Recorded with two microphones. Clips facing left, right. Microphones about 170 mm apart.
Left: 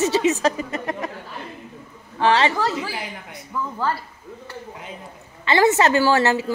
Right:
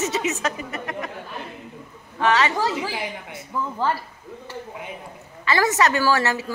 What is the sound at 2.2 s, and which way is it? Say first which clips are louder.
Speech: left 2 dB; 30° left (ahead or behind).